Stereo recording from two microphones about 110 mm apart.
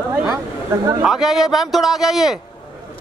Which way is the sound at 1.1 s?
5° right (ahead or behind).